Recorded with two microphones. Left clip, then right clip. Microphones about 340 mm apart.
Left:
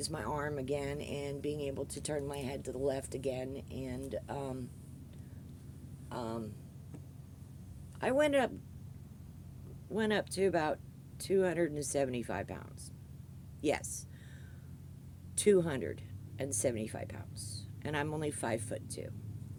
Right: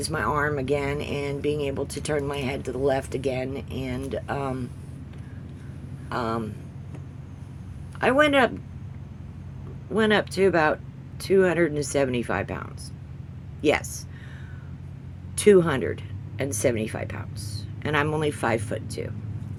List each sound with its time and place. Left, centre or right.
0.0 s speech: left
6.1 s speech: left
7.9 s speech: left
9.9 s speech: left
15.4 s speech: left